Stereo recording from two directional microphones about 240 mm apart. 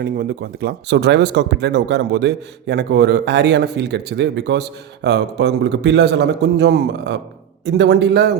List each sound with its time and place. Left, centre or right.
0.0 s speech: right